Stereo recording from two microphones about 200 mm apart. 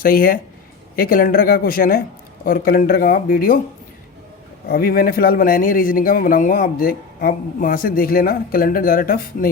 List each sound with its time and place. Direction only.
0.0 s speech: 45° left (ahead or behind)
4.7 s speech: 50° left (ahead or behind)